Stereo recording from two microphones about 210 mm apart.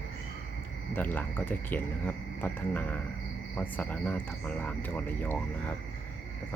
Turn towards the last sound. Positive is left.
turn(degrees=10)  # may be behind; listen again after turning